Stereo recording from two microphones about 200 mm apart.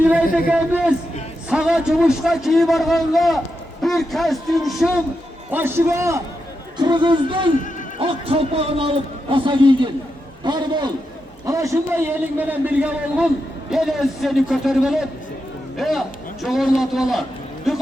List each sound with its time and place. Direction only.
0.3 s a man's voice: 5° right (ahead or behind)